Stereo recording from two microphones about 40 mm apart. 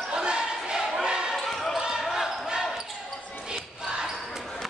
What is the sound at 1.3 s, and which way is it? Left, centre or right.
Basketball bounce, centre.